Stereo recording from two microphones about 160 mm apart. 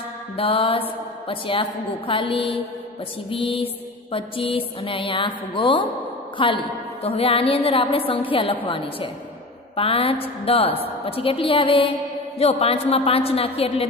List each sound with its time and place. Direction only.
0.4 s mantra: 35° left (ahead or behind)